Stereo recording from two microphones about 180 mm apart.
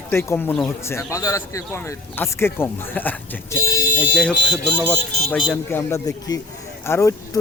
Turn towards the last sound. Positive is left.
turn(degrees=15)  # may be behind; listen again after turning